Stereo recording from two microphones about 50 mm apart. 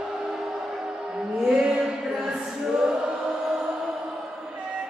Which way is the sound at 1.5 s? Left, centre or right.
Centre.